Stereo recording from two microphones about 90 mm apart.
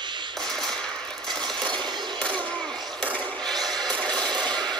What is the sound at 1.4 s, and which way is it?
Coin, 60° right (ahead or behind).